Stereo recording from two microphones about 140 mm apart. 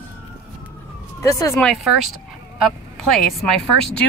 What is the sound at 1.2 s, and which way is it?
Speech, 20° left (ahead or behind).